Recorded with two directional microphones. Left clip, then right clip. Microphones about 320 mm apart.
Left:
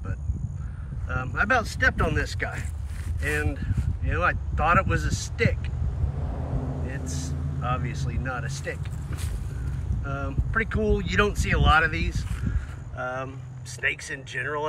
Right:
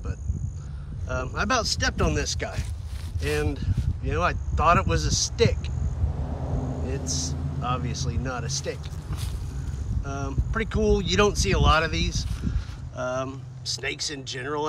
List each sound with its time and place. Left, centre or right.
1.0 s speech: centre
6.5 s vehicle: right
6.9 s speech: centre
10.0 s speech: centre